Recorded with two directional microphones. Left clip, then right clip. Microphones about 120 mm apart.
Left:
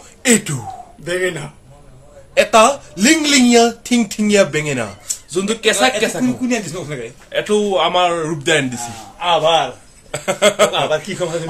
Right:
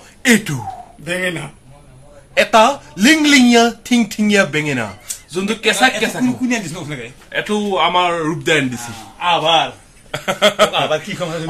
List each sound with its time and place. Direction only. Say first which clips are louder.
0.2 s speech: right 1 dB; 5° right (ahead or behind)
1.0 s a man's voice: left 1 dB; 40° left (ahead or behind)
2.3 s speech: even; 5° right (ahead or behind); by 7.1 s 10° left (ahead or behind)
7.2 s speech: left 3 dB; centre (ahead or behind)
9.2 s a man's voice: even; 15° left (ahead or behind)
10.1 s a sound: even; 10° right (ahead or behind)